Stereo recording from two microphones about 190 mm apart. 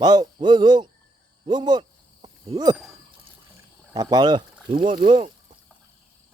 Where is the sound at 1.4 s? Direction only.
20° right (ahead or behind).